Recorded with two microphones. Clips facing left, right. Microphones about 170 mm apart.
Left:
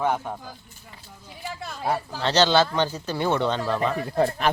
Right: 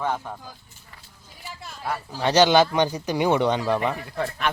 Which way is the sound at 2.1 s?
10° right (ahead or behind).